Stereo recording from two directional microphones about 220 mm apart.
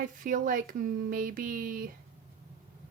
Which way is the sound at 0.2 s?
40° right (ahead or behind).